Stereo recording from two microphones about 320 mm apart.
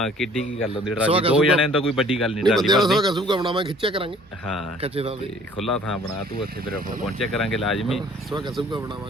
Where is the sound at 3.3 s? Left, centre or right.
Centre.